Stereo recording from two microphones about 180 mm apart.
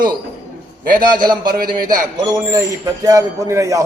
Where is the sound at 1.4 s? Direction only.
55° right (ahead or behind).